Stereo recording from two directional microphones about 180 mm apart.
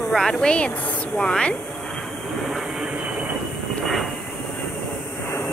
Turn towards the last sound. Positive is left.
turn(degrees=0)  # may be behind; listen again after turning